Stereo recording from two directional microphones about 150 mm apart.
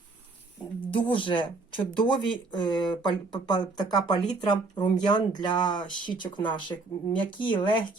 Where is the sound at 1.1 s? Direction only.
35° left (ahead or behind).